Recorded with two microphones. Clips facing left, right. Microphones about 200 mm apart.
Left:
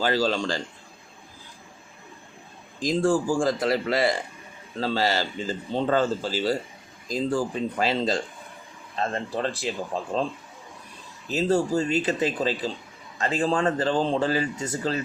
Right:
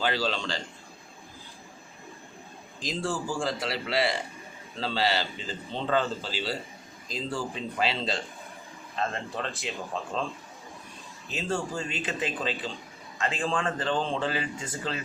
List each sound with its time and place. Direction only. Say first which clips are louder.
0.0 s a man's voice: left 5 dB; 40° left (ahead or behind)
2.8 s a man's voice: left 9 dB; 50° left (ahead or behind)
11.3 s speech: left 9 dB; 40° left (ahead or behind)